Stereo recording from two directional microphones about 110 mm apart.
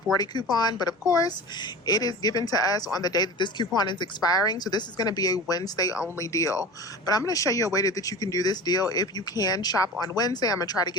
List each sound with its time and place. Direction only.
0.5 s speech: 40° left (ahead or behind)